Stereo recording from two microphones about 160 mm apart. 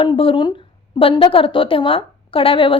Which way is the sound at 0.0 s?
30° left (ahead or behind).